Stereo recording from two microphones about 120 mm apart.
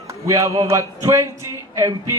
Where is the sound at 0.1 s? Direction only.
25° right (ahead or behind).